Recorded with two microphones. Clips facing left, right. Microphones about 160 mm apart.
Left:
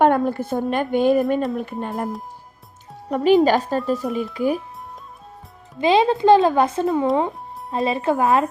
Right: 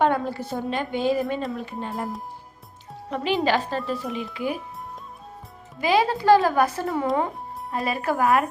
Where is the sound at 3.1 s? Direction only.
45° left (ahead or behind).